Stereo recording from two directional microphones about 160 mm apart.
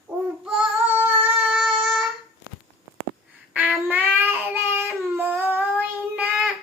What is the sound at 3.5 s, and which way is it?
Child singing, 10° right (ahead or behind).